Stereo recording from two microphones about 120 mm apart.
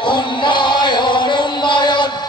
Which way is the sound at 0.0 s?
40° left (ahead or behind).